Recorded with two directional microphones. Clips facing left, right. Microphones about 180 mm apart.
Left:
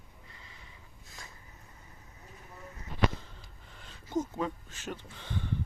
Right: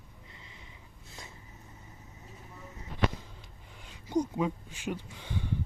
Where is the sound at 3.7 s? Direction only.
10° right (ahead or behind).